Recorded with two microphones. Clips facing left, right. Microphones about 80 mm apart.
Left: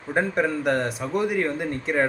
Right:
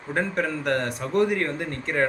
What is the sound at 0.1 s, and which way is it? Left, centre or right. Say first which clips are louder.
A man's voice: left 3 dB; centre.